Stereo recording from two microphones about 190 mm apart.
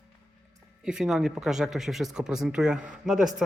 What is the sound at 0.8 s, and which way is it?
Speech, 5° right (ahead or behind).